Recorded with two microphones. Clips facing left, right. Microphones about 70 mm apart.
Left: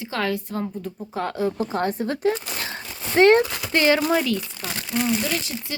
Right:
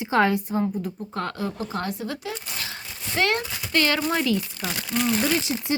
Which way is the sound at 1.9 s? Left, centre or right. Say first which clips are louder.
Left 8 dB; left.